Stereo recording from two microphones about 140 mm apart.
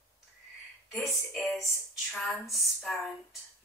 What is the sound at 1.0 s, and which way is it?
Speech, centre (ahead or behind).